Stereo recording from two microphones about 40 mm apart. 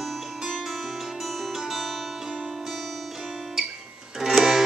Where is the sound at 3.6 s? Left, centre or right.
Centre.